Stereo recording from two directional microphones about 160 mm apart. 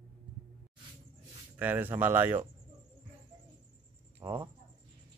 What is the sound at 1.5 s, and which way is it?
Speech, 10° right (ahead or behind).